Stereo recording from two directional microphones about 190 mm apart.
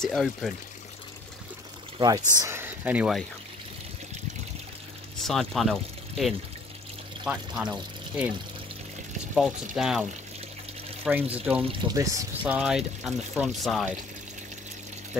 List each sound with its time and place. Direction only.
0.0 s speech: centre (ahead or behind)
2.0 s speech: 20° right (ahead or behind)
5.2 s speech: centre (ahead or behind)
9.3 s speech: centre (ahead or behind)
11.3 s speech: 5° right (ahead or behind)
11.9 s speech: 15° right (ahead or behind)
12.5 s speech: 5° right (ahead or behind)